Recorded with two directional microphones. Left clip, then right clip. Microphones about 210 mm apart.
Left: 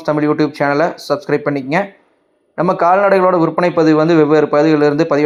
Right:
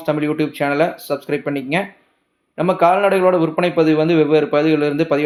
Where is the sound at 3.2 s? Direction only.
15° left (ahead or behind).